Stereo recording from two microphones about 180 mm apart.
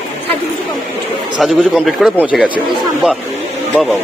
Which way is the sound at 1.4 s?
Centre (ahead or behind).